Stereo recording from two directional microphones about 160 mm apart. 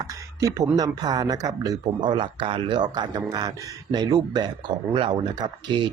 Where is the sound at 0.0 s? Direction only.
20° right (ahead or behind).